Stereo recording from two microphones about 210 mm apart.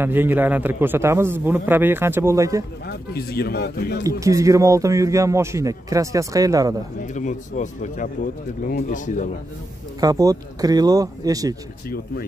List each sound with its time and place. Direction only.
0.0 s a man's voice: 10° right (ahead or behind)
2.9 s speech: 45° left (ahead or behind)
4.2 s a man's voice: 15° right (ahead or behind)
7.2 s speech: 35° left (ahead or behind)
9.9 s a man's voice: 15° right (ahead or behind)